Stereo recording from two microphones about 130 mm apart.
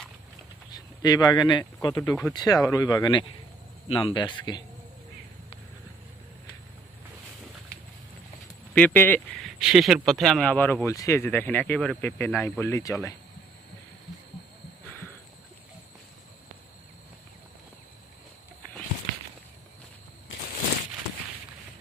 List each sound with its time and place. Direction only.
0.7 s speech: 30° left (ahead or behind)
8.7 s speech: 15° left (ahead or behind)
9.3 s speech: centre (ahead or behind); by 13.1 s 25° left (ahead or behind)